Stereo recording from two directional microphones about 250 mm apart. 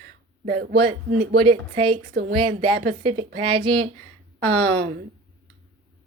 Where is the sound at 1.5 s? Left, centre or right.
Right.